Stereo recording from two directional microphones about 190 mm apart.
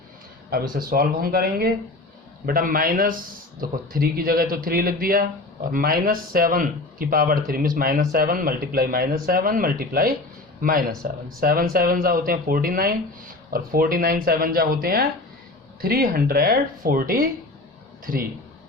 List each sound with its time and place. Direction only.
0.5 s speech: 50° right (ahead or behind)